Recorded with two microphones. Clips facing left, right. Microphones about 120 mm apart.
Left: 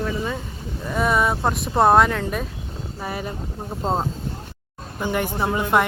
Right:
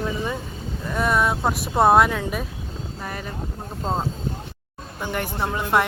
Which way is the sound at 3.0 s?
10° left (ahead or behind).